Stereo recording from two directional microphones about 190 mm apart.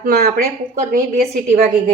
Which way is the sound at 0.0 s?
50° right (ahead or behind).